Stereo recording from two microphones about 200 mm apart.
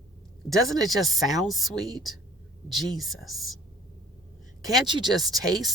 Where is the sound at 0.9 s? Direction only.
Centre (ahead or behind).